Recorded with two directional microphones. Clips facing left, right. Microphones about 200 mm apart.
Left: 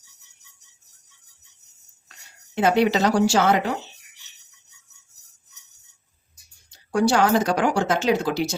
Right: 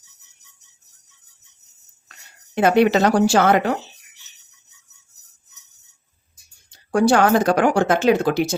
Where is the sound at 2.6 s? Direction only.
55° right (ahead or behind).